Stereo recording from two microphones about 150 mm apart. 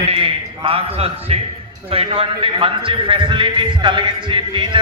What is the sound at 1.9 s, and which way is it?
A man's voice, 40° right (ahead or behind).